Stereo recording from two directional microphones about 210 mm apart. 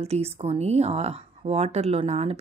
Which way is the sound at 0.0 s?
30° right (ahead or behind).